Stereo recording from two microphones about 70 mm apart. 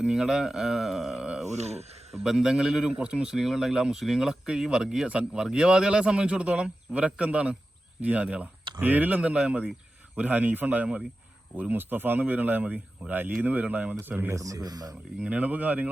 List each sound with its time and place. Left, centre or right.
0.0 s a man's voice: centre; by 14.3 s right
14.3 s speech: right
15.2 s speech: centre